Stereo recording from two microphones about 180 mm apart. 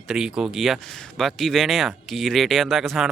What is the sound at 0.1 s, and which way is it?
Speech, 5° right (ahead or behind).